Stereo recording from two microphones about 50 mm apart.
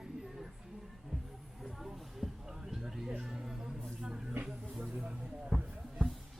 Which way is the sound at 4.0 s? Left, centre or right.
Centre.